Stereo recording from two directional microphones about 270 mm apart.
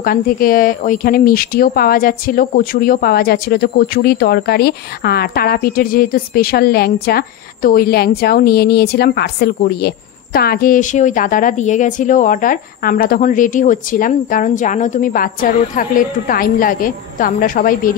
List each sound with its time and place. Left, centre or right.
0.0 s speech: left